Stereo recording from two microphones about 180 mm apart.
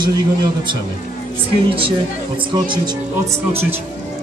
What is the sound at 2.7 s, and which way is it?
Speech, 25° right (ahead or behind).